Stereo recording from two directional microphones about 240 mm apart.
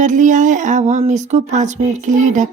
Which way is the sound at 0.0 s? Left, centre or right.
Right.